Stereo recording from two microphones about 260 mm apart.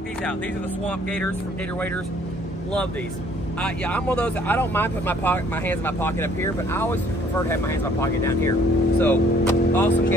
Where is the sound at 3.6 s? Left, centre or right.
Centre.